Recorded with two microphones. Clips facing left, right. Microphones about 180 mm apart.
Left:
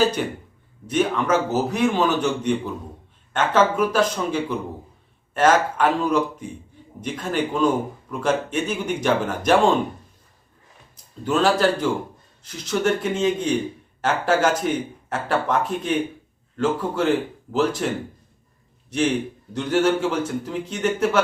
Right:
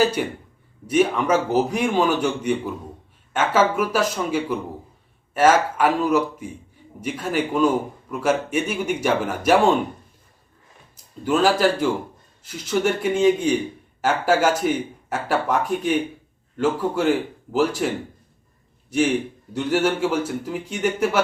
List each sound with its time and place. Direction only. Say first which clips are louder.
0.0 s speech: even; 10° right (ahead or behind)
11.2 s speech: right 1 dB; 10° right (ahead or behind)
19.5 s speech: left 1 dB; 10° right (ahead or behind)